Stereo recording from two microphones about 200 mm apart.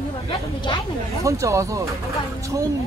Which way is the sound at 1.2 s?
15° right (ahead or behind).